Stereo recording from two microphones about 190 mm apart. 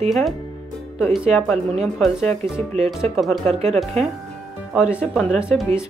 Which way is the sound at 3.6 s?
35° right (ahead or behind).